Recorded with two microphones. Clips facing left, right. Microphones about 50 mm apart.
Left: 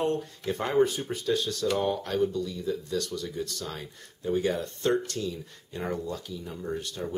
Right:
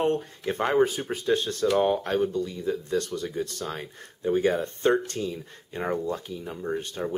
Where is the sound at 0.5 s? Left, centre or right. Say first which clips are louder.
Right 2 dB; right.